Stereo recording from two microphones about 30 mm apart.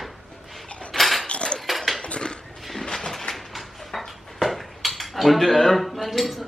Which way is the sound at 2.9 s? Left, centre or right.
Centre.